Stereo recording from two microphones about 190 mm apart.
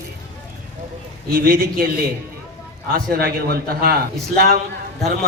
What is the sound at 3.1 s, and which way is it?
A man's voice, 55° right (ahead or behind).